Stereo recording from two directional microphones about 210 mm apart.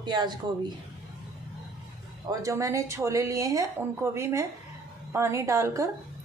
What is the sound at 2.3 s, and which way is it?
Speech, 15° right (ahead or behind).